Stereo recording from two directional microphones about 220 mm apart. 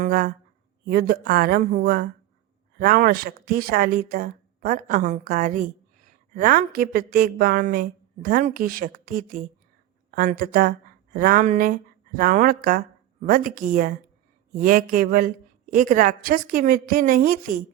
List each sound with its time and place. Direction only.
0.0 s a woman's voice: 40° right (ahead or behind)